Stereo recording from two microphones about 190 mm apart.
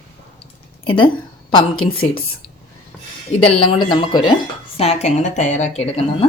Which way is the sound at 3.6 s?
25° left (ahead or behind).